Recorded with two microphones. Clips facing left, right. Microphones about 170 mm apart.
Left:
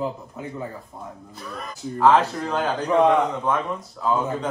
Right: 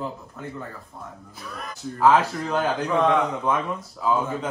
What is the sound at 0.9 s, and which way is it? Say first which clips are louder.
Speech: left 2 dB; 20° left (ahead or behind).